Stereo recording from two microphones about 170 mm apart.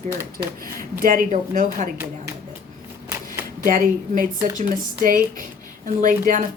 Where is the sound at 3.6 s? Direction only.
55° right (ahead or behind).